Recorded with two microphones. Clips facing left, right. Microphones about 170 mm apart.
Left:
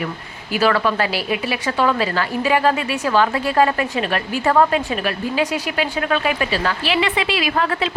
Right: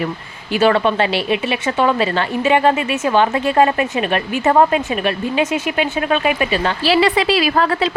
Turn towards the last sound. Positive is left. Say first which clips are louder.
# right 4 dB
turn(degrees=-35)  # may be behind; listen again after turning